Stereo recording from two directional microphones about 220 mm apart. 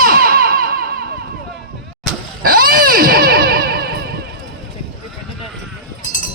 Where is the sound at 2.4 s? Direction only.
40° right (ahead or behind).